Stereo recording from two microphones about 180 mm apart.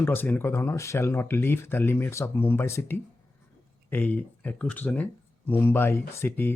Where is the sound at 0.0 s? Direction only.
10° left (ahead or behind).